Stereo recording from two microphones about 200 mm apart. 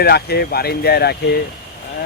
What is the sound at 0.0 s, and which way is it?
Speech, 50° left (ahead or behind).